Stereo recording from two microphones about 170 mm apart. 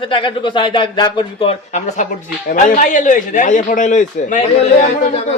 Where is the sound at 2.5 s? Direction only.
50° left (ahead or behind).